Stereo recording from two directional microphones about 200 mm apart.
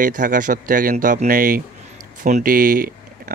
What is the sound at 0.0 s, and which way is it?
Speech, 40° right (ahead or behind).